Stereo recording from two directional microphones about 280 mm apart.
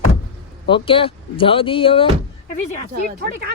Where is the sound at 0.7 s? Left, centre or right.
Centre.